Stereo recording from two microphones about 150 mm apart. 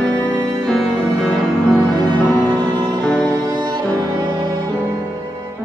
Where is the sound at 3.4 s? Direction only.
30° right (ahead or behind).